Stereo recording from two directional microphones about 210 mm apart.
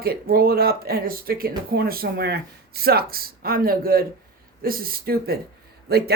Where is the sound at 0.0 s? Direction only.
45° right (ahead or behind).